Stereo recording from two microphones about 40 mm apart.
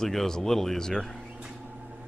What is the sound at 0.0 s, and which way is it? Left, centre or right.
Speech, centre.